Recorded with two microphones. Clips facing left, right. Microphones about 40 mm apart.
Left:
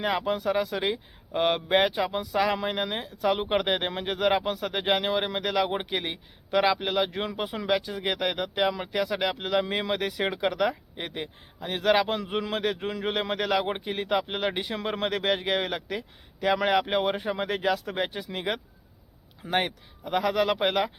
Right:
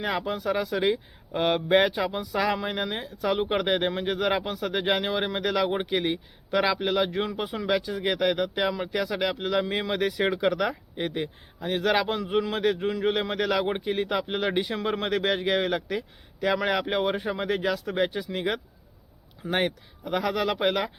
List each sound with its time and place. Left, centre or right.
0.0 s speech: centre